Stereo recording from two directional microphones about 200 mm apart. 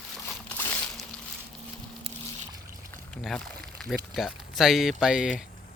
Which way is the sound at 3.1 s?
5° left (ahead or behind).